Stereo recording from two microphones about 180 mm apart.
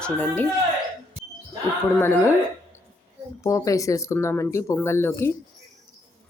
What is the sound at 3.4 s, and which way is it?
Speech, 15° left (ahead or behind).